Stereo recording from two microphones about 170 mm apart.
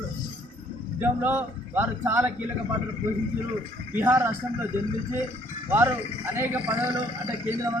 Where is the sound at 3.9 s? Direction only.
15° right (ahead or behind).